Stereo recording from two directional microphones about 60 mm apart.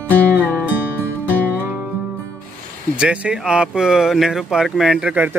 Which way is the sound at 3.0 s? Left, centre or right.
Centre.